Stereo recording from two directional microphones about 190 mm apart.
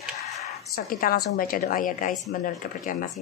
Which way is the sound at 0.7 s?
50° left (ahead or behind).